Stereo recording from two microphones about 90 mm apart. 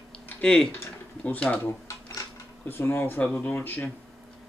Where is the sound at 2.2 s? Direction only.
35° left (ahead or behind).